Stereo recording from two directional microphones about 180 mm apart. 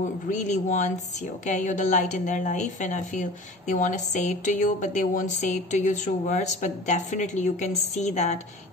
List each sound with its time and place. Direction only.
0.0 s a woman's voice: 45° left (ahead or behind)